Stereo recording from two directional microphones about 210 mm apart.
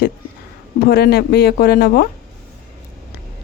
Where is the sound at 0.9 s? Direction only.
50° left (ahead or behind).